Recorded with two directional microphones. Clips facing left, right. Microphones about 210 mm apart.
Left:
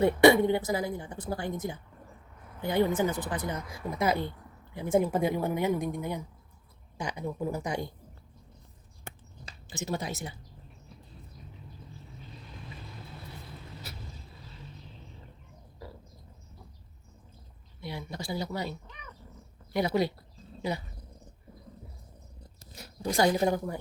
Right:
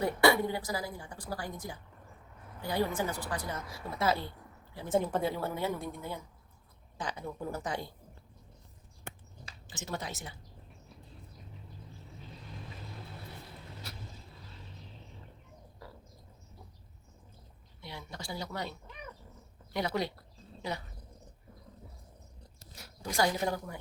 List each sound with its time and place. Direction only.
0.0 s a woman's voice: 20° left (ahead or behind)
9.6 s a woman's voice: 10° left (ahead or behind)
17.8 s a woman's voice: 10° left (ahead or behind)
19.7 s a woman's voice: 10° left (ahead or behind)
22.8 s speech: 25° left (ahead or behind)